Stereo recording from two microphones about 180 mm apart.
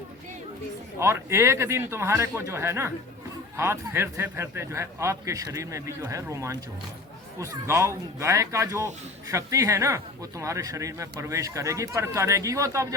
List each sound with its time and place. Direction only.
0.9 s speech: 15° right (ahead or behind)